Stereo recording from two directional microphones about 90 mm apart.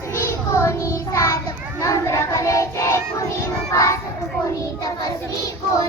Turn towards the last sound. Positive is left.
turn(degrees=35)  # may be behind; listen again after turning